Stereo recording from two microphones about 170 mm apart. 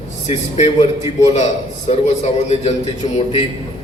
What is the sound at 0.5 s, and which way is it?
A man's voice, 40° left (ahead or behind).